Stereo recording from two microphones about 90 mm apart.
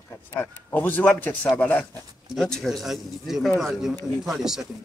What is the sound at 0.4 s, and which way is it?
A man's voice, 20° left (ahead or behind).